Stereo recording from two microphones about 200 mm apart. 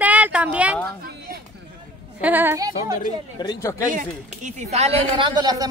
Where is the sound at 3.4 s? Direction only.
20° left (ahead or behind).